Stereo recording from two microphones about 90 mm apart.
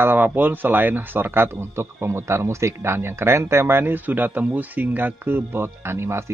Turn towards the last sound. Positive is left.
turn(degrees=-30)  # may be behind; listen again after turning